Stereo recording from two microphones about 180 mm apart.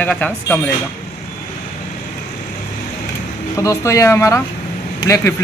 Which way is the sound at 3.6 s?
15° left (ahead or behind).